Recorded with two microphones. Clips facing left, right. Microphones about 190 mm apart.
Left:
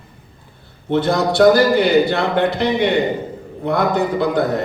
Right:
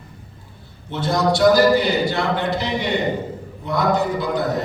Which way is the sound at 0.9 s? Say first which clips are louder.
Left 4 dB; 60° left (ahead or behind).